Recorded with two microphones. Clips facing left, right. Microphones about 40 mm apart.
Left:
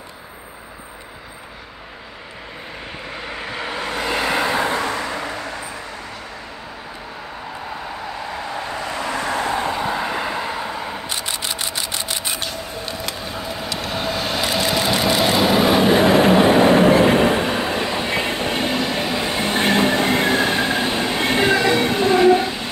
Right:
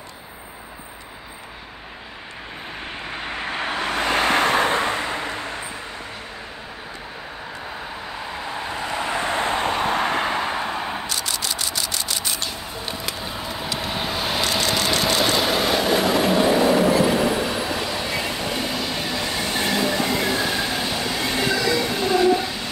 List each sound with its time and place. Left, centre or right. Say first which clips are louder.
3.5 s vehicle: right 1 dB; right
4.7 s vehicle: even; right
8.3 s vehicle: left 1 dB; centre
9.2 s vehicle: left 1 dB; right
10.4 s vehicle: right 1 dB; right
11.1 s camera: left 1 dB; left
13.0 s bird: left 2 dB; centre
13.7 s vehicle: left 3 dB; centre
14.4 s vehicle: left 3 dB; centre
15.9 s train: left 5 dB; left
18.9 s train: left 4 dB; left